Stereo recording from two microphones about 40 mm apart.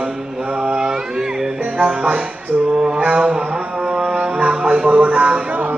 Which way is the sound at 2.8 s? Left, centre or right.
Right.